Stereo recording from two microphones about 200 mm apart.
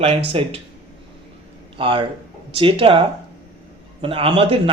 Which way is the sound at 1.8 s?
25° right (ahead or behind).